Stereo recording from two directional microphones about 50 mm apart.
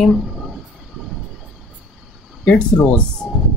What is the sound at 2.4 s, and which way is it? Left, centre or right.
Speech, left.